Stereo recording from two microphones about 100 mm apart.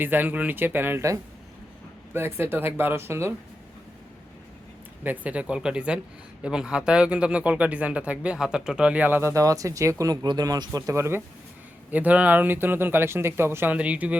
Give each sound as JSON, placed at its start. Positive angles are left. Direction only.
{"t": 0.0, "sound": "speech", "side_deg": -20}
{"t": 5.2, "sound": "speech", "side_deg": -15}
{"t": 9.3, "sound": "speech", "side_deg": -35}
{"t": 11.9, "sound": "speech", "side_deg": -15}